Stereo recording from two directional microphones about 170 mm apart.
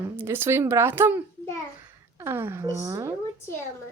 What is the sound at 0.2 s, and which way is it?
A woman's voice, 15° right (ahead or behind).